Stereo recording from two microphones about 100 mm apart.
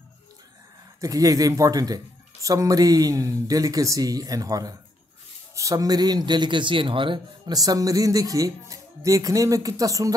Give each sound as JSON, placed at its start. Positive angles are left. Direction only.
{"t": 1.0, "sound": "a man's voice", "side_deg": -35}
{"t": 7.5, "sound": "speech", "side_deg": -40}